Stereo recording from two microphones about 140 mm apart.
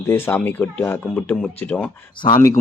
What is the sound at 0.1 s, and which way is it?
Speech, 15° left (ahead or behind).